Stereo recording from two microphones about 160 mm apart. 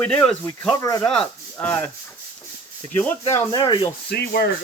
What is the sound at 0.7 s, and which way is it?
Speech, 20° left (ahead or behind).